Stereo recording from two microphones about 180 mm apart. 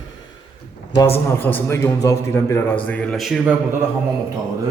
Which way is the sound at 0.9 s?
15° left (ahead or behind).